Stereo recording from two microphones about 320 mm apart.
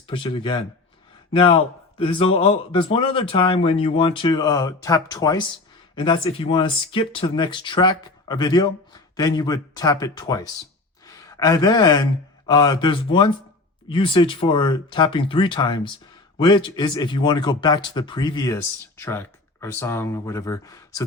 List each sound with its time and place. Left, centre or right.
0.1 s speech: centre